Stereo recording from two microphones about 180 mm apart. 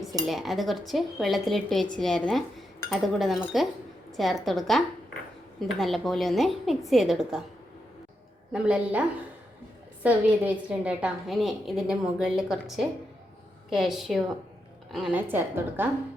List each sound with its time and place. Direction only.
0.3 s speech: centre (ahead or behind)
8.5 s a woman's voice: 5° right (ahead or behind)
15.3 s a woman's voice: 10° right (ahead or behind)